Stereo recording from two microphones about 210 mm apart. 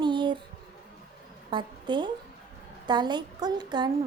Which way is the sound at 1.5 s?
20° right (ahead or behind).